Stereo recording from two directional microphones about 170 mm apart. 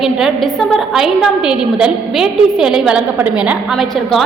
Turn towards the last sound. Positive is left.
turn(degrees=0)  # may be behind; listen again after turning